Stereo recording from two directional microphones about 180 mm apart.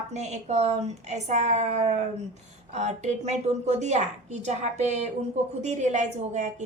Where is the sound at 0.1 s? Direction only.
40° right (ahead or behind).